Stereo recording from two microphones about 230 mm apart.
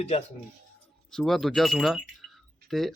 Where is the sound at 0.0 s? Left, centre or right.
Left.